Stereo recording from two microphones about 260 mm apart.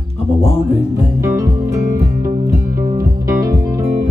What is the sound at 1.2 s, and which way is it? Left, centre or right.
Music, centre.